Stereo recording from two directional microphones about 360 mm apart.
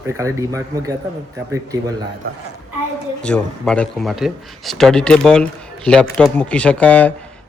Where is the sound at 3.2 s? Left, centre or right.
Centre.